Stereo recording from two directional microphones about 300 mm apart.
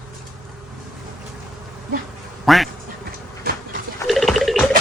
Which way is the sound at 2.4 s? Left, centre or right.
Centre.